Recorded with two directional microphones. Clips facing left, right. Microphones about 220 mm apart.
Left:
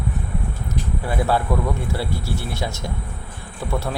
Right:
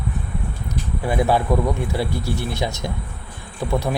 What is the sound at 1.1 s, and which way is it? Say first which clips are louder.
Speech: right 3 dB; 15° right (ahead or behind).